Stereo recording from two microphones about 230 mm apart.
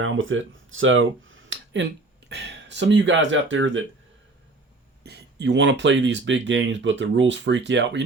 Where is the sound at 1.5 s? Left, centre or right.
Right.